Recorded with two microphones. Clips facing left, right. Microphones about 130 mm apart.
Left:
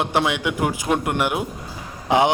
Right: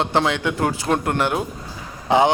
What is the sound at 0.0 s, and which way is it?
A man's voice, 15° left (ahead or behind).